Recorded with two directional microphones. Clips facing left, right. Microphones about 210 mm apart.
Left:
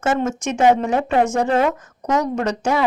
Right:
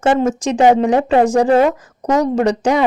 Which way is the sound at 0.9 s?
35° right (ahead or behind).